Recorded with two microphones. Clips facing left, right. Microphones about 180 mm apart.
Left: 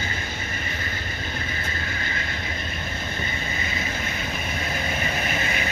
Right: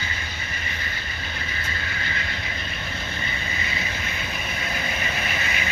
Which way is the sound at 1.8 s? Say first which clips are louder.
Left 1 dB; 45° left (ahead or behind).